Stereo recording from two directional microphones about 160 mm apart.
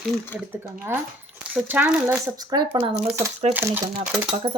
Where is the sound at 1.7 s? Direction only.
10° right (ahead or behind).